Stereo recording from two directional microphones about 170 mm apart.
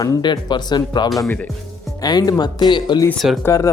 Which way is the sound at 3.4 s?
20° left (ahead or behind).